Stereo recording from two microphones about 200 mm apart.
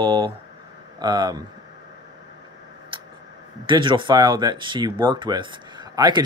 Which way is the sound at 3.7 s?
25° right (ahead or behind).